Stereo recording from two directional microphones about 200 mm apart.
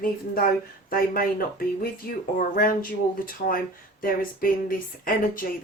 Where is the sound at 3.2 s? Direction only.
45° left (ahead or behind).